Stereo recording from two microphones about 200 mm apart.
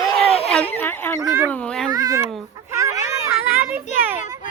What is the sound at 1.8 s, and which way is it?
Speech, 20° right (ahead or behind).